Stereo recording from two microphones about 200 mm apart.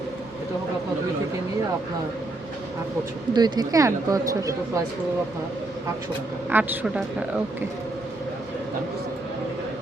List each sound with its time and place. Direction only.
3.3 s speech: 20° right (ahead or behind)
6.5 s speech: 10° right (ahead or behind)